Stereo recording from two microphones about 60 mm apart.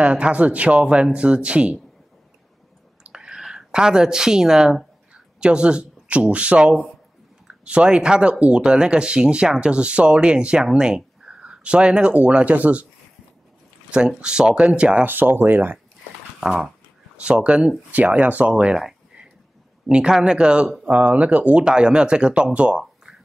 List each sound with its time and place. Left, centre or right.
0.0 s speech: right
3.0 s a sound: centre
5.1 s speech: centre
13.9 s speech: centre
15.0 s speech: right
16.3 s speech: centre
17.2 s speech: centre
19.9 s speech: centre